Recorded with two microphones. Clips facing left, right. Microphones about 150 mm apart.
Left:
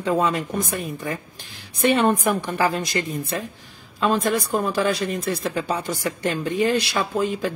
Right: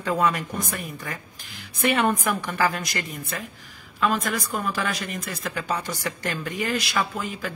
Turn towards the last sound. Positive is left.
turn(degrees=30)  # may be behind; listen again after turning